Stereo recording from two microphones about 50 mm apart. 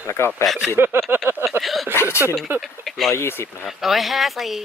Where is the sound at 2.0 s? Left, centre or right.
Left.